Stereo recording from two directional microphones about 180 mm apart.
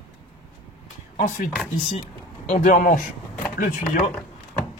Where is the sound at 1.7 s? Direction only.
35° left (ahead or behind).